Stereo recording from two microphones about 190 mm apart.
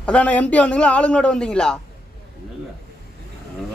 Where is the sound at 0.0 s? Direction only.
5° left (ahead or behind).